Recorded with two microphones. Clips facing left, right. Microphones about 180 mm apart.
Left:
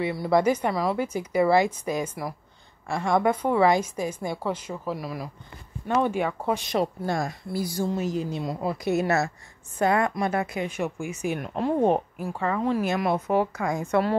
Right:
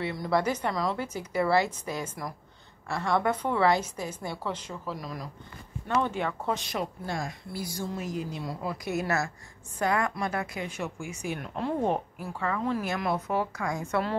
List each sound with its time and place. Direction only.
0.0 s a woman's voice: 10° left (ahead or behind)
7.1 s speech: 45° left (ahead or behind)
7.7 s a woman's voice: 30° left (ahead or behind)
11.5 s speech: 45° left (ahead or behind)
11.9 s a woman's voice: 15° left (ahead or behind)
12.4 s a woman's voice: 30° left (ahead or behind)